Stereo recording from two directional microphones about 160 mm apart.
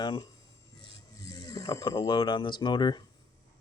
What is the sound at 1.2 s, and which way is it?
Speech, 20° left (ahead or behind).